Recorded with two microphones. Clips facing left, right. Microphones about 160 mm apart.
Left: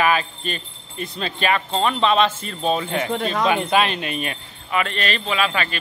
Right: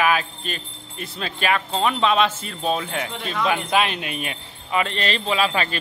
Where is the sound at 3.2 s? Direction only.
40° left (ahead or behind).